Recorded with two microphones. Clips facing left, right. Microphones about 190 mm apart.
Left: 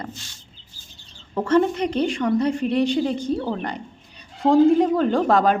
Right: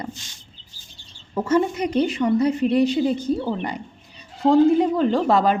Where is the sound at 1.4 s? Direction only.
10° right (ahead or behind).